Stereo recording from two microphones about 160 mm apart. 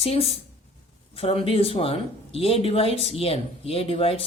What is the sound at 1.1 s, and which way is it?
Speech, 35° left (ahead or behind).